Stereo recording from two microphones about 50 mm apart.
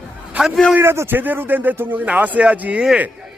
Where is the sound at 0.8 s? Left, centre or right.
Right.